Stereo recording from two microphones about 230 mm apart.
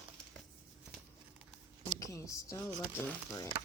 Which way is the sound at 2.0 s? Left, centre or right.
Centre.